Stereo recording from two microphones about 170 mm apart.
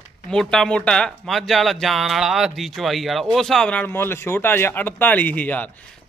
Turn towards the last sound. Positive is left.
turn(degrees=10)  # may be behind; listen again after turning